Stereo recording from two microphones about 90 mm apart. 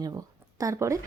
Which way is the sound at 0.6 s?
35° right (ahead or behind).